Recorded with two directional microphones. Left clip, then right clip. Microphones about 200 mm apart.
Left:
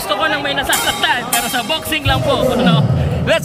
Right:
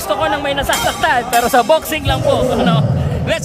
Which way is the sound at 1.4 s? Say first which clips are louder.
Right 7 dB; 30° right (ahead or behind).